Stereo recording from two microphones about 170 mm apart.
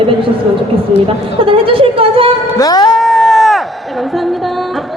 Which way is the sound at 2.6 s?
25° left (ahead or behind).